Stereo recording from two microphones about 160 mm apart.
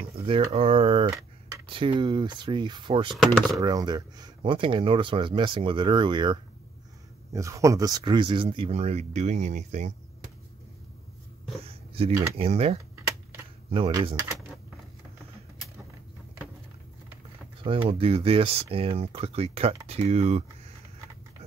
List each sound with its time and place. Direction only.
0.2 s speech: 35° right (ahead or behind)
11.6 s speech: 35° right (ahead or behind)
17.6 s speech: 35° right (ahead or behind)